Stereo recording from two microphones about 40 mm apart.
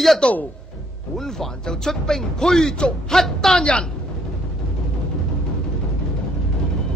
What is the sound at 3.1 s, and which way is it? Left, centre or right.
Speech, centre.